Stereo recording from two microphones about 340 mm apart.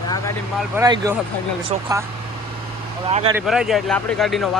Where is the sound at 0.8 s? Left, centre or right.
Centre.